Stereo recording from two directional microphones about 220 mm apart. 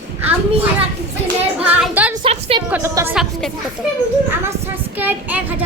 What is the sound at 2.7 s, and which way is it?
Speech, 10° right (ahead or behind).